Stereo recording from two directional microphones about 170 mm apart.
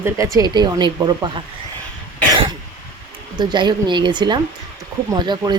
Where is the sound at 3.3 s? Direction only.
25° right (ahead or behind).